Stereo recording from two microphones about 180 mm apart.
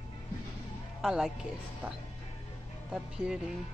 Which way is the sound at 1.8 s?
10° right (ahead or behind).